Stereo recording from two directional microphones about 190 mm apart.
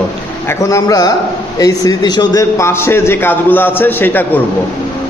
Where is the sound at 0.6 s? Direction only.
15° left (ahead or behind).